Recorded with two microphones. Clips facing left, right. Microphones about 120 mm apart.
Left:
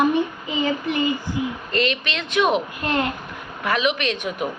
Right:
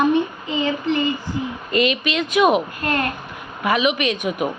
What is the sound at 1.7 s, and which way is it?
Speech, 10° right (ahead or behind).